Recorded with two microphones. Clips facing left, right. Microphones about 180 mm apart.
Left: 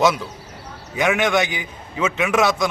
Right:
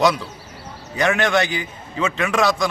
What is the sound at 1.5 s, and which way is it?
Speech, 20° left (ahead or behind).